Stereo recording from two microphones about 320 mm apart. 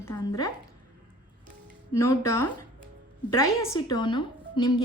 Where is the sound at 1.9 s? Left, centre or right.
Centre.